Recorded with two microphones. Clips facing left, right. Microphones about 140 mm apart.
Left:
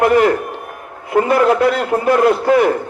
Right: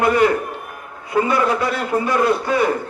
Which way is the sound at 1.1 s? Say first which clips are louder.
Left 5 dB; 55° left (ahead or behind).